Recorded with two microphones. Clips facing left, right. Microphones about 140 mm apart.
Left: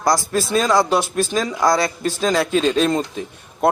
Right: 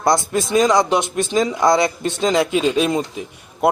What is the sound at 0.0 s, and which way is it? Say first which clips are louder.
A man's voice: right 1 dB; 25° right (ahead or behind).